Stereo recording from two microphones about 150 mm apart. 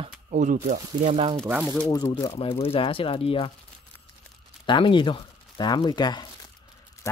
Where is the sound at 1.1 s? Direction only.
40° right (ahead or behind).